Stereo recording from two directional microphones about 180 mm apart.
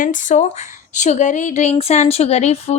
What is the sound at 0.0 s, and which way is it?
Speech, 45° left (ahead or behind).